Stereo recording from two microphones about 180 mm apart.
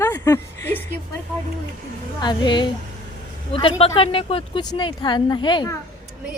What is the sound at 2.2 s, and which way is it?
Speech, 25° left (ahead or behind).